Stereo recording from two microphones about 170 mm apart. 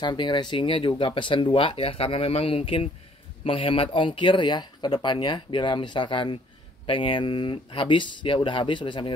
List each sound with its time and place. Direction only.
0.0 s speech: 25° left (ahead or behind)